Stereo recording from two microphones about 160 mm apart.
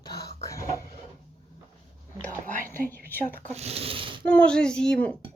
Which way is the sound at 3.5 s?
40° right (ahead or behind).